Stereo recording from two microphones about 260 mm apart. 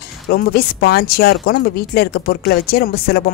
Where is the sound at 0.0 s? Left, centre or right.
Left.